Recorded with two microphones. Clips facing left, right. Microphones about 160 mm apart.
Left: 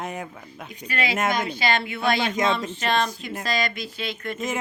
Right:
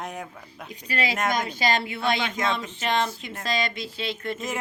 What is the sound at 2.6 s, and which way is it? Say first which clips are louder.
Speech: left 2 dB; 20° right (ahead or behind).